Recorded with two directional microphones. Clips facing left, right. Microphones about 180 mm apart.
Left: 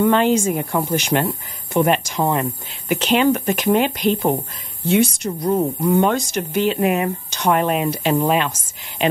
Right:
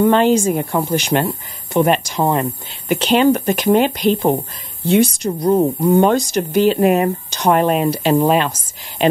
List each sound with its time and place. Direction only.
0.0 s speech: 35° right (ahead or behind)